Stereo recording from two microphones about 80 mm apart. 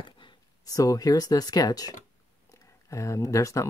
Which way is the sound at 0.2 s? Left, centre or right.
Left.